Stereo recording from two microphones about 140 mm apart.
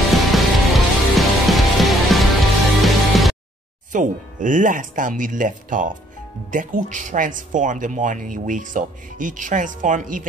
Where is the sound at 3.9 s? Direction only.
65° right (ahead or behind).